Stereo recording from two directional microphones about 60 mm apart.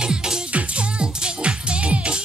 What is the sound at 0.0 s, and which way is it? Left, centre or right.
Music, centre.